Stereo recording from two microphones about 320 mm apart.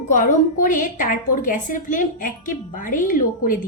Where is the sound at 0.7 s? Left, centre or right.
Left.